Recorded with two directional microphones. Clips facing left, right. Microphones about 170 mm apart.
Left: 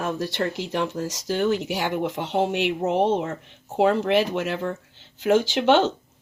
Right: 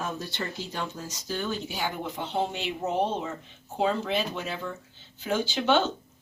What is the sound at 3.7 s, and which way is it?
Speech, 70° left (ahead or behind).